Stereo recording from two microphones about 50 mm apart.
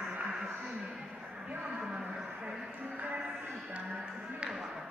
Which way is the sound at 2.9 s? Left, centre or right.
Right.